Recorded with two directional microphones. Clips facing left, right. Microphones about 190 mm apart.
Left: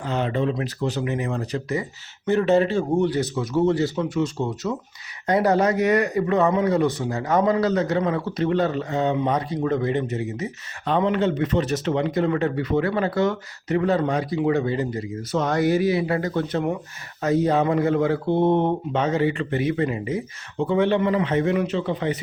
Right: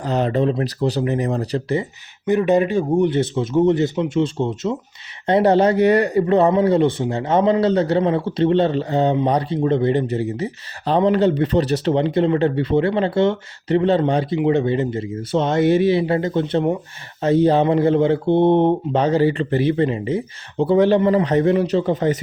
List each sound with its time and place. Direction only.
0.0 s speech: 40° right (ahead or behind)
2.2 s a man's voice: 15° right (ahead or behind); by 22.2 s 40° right (ahead or behind)